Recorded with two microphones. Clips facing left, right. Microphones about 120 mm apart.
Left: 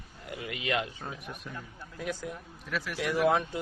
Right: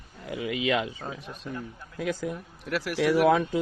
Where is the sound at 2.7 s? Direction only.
85° right.